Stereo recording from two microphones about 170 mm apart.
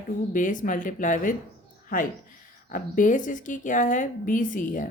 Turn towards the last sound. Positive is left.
turn(degrees=50)  # may be behind; listen again after turning